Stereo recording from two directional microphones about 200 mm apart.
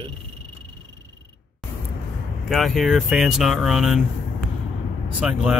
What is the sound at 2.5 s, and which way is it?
Speech, centre (ahead or behind).